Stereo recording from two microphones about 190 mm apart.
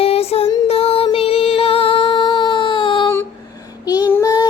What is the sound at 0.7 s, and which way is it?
Music, 30° left (ahead or behind).